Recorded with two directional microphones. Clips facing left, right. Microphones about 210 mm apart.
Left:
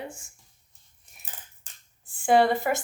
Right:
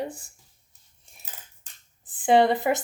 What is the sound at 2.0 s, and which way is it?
Speech, 20° right (ahead or behind).